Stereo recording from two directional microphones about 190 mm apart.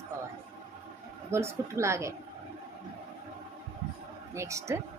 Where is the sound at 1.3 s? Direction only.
15° right (ahead or behind).